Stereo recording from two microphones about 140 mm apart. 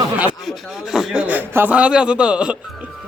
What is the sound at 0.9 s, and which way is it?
A man's voice, 5° right (ahead or behind).